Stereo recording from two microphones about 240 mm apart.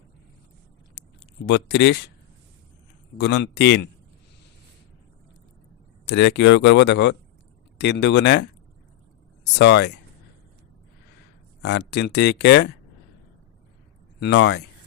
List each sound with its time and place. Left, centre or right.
1.5 s speech: left
3.2 s speech: left
6.1 s speech: left
11.6 s speech: left
14.2 s speech: left